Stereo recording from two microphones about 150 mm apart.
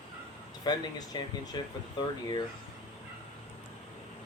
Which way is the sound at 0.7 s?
30° left (ahead or behind).